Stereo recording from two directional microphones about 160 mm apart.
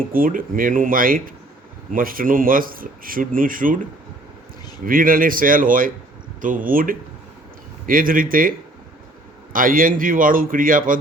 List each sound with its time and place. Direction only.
0.0 s speech: 60° right (ahead or behind)
4.9 s speech: 60° right (ahead or behind)